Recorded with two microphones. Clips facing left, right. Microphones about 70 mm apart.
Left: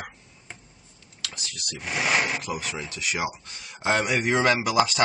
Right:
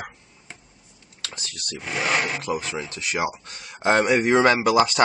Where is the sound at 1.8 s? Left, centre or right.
Centre.